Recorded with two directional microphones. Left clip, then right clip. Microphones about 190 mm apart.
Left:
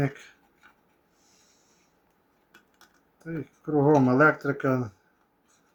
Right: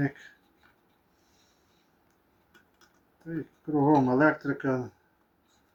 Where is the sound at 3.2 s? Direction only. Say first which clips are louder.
Left 1 dB; 45° left (ahead or behind).